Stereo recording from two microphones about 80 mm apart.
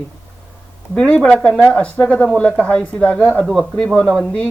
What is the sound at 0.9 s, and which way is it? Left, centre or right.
Speech, centre.